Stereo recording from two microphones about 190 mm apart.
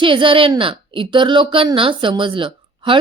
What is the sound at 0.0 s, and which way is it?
A woman's voice, 25° right (ahead or behind).